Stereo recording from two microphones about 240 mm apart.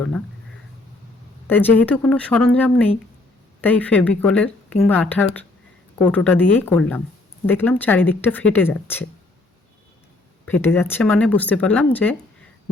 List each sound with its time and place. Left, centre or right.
1.5 s speech: centre
10.4 s speech: centre